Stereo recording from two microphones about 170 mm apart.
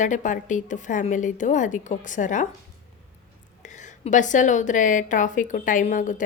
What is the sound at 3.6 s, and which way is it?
A woman's voice, 45° left (ahead or behind).